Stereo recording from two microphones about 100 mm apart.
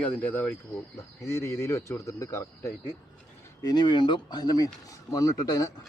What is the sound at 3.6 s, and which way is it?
Speech, 45° left (ahead or behind).